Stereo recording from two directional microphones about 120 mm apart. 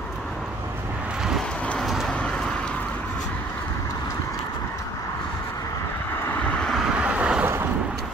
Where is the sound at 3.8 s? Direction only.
25° left (ahead or behind).